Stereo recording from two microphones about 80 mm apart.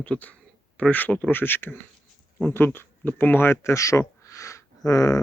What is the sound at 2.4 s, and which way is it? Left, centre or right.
Speech, left.